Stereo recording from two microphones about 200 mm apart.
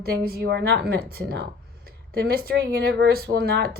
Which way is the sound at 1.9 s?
50° right (ahead or behind).